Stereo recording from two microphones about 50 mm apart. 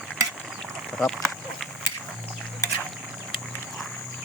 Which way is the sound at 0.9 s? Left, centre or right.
Centre.